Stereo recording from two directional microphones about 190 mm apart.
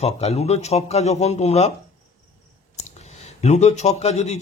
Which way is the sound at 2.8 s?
35° left (ahead or behind).